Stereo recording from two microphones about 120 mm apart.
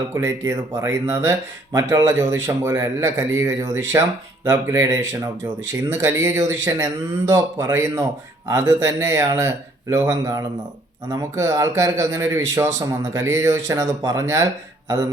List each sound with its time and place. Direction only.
0.1 s speech: 25° right (ahead or behind)